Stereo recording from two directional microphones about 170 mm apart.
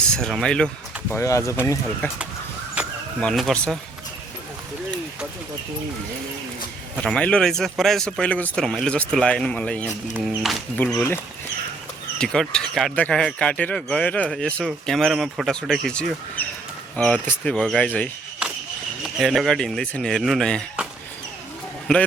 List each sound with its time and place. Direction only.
0.1 s speech: 5° left (ahead or behind)
1.1 s speech: 15° left (ahead or behind)
2.8 s a sound: 5° right (ahead or behind)
3.2 s speech: centre (ahead or behind)
6.9 s speech: 5° left (ahead or behind)
10.8 s speech: 10° left (ahead or behind)
12.2 s speech: 5° left (ahead or behind)